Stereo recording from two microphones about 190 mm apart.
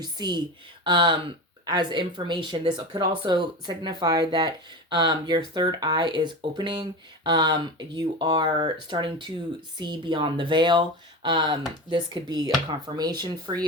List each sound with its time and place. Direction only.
0.0 s speech: 25° right (ahead or behind)